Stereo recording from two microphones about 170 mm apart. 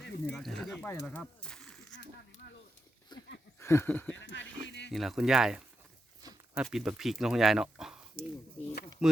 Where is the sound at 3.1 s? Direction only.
25° left (ahead or behind).